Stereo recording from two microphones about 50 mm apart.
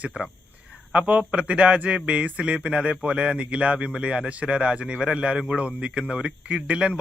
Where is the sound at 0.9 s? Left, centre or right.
Right.